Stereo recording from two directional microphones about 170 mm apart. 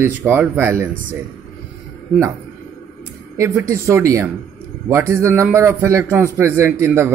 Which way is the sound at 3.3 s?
15° right (ahead or behind).